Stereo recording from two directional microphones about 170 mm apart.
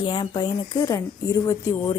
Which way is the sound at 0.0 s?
30° left (ahead or behind).